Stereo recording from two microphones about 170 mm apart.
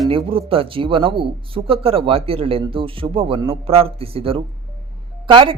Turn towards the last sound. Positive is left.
turn(degrees=-30)  # may be behind; listen again after turning